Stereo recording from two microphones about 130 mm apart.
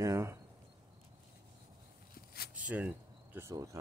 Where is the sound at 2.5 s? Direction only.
10° right (ahead or behind).